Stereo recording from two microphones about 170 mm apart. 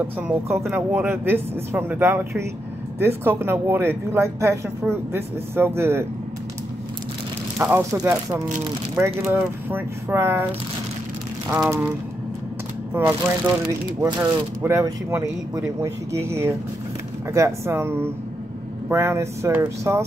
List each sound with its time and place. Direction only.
0.0 s speech: 15° right (ahead or behind)
7.5 s speech: 10° right (ahead or behind)
7.9 s speech: 20° right (ahead or behind)
12.9 s speech: 15° right (ahead or behind)